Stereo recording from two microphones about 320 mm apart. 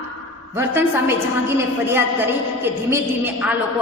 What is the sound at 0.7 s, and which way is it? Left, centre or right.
A woman's voice, centre.